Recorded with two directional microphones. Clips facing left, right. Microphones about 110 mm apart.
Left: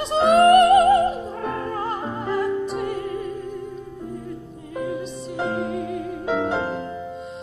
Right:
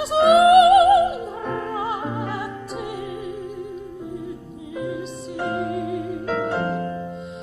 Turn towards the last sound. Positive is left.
turn(degrees=15)  # may be behind; listen again after turning